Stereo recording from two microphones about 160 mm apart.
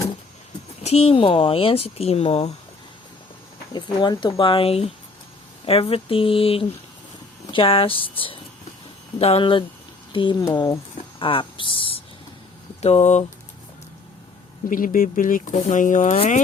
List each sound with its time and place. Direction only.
0.8 s speech: 40° left (ahead or behind)
3.7 s speech: 25° left (ahead or behind)
10.4 s speech: 20° left (ahead or behind)
11.2 s a sound: 35° left (ahead or behind)
12.8 s speech: 40° left (ahead or behind)
14.7 s speech: 60° left (ahead or behind)
16.1 s speech: 40° left (ahead or behind)